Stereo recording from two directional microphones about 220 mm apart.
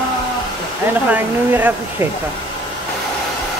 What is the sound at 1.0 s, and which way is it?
Speech, 5° right (ahead or behind).